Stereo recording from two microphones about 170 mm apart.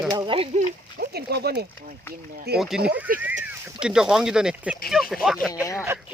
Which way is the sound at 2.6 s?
Centre (ahead or behind).